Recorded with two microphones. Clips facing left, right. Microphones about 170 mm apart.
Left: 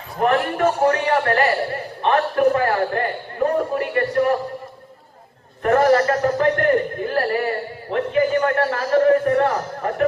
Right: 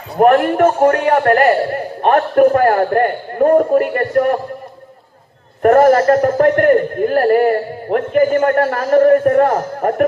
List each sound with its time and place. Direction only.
0.2 s a man's voice: 55° right (ahead or behind)
5.6 s a man's voice: 45° right (ahead or behind)